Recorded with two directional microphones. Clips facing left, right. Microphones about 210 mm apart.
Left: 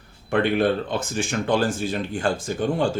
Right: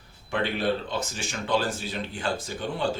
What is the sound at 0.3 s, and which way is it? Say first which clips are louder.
Speech: left 6 dB; 55° left (ahead or behind).